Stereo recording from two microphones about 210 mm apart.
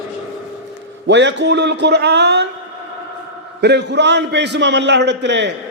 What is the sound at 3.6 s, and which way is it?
A man's voice, 55° right (ahead or behind).